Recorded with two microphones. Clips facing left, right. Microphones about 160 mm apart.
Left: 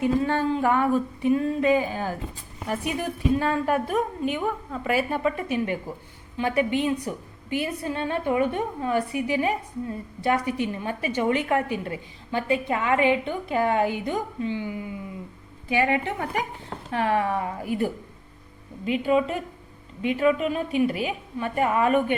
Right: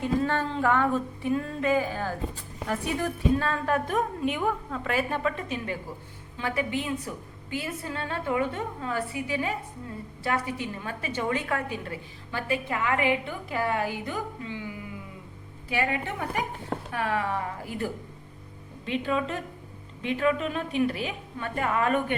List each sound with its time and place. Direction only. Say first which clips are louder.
0.0 s speech: left 4 dB; 15° left (ahead or behind)
3.8 s a woman's voice: left 2 dB; centre (ahead or behind); by 14.7 s 25° left (ahead or behind)
15.7 s a woman's voice: left 5 dB; 20° left (ahead or behind)